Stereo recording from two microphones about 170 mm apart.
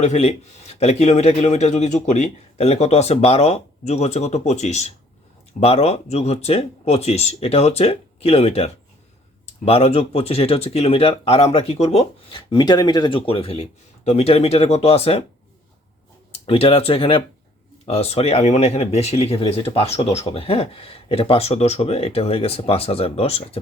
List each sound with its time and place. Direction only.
0.0 s speech: 40° left (ahead or behind)
16.3 s speech: 35° left (ahead or behind)